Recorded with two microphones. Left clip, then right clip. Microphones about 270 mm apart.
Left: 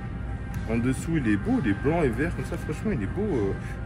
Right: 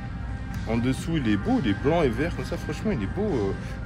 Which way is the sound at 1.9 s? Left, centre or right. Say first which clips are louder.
Right 3 dB; right.